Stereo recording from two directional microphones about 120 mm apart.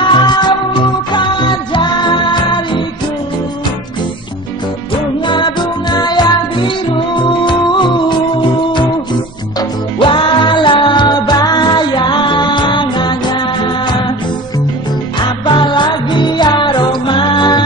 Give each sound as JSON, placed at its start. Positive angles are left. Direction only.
{"t": 0.0, "sound": "music", "side_deg": 40}
{"t": 5.2, "sound": "music", "side_deg": 40}
{"t": 15.1, "sound": "music", "side_deg": 40}